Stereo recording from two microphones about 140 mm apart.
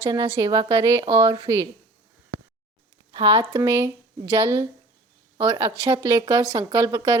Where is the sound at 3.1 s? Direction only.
35° right (ahead or behind).